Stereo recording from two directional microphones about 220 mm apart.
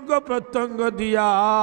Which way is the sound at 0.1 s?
15° right (ahead or behind).